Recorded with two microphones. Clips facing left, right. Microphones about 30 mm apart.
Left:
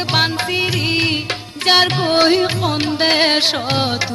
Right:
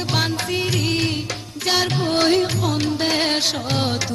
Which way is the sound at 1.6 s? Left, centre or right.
Left.